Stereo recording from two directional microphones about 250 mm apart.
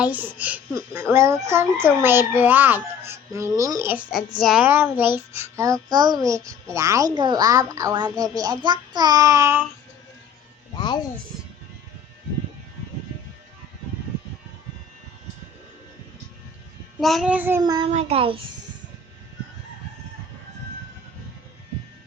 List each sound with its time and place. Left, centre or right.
0.0 s a child's voice: centre
10.8 s speech: centre
17.0 s a child's voice: centre; by 18.4 s right